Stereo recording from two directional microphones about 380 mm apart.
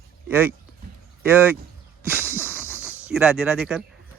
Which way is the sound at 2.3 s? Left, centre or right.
Centre.